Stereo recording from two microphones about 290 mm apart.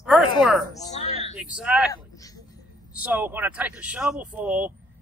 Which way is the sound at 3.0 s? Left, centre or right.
Centre.